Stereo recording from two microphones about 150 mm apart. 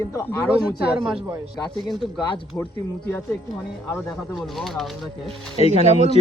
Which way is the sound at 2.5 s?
15° left (ahead or behind).